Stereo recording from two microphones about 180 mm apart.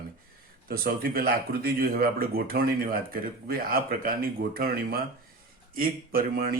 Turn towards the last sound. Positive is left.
turn(degrees=-55)  # may be behind; listen again after turning